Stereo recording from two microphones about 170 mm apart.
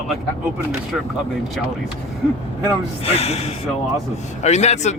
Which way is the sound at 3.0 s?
35° left (ahead or behind).